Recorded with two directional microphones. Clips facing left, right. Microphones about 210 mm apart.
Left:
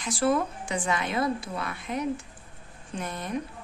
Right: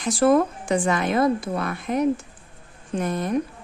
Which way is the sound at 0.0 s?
50° right (ahead or behind).